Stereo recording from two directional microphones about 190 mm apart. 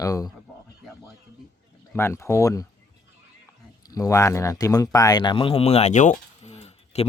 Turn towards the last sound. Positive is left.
turn(degrees=35)  # may be behind; listen again after turning